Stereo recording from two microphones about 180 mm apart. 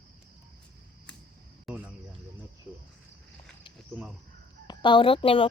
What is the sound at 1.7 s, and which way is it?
Speech, 10° right (ahead or behind).